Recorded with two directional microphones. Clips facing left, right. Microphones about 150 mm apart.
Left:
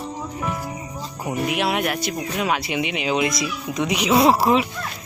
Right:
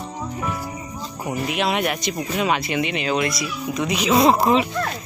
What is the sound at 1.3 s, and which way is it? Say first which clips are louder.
Speech: even; 5° left (ahead or behind).